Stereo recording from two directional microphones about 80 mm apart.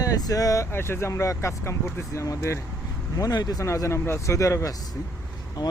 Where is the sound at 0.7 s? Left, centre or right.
Left.